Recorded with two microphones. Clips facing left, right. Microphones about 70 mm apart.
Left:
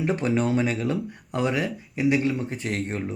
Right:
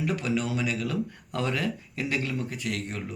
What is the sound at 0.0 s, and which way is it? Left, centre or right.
Speech, left.